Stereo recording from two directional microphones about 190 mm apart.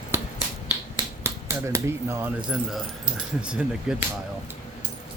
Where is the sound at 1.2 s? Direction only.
15° right (ahead or behind).